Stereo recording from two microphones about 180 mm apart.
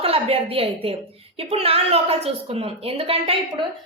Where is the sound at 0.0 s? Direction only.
35° right (ahead or behind).